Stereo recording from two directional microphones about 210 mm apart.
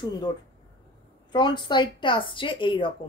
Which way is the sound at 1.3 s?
20° left (ahead or behind).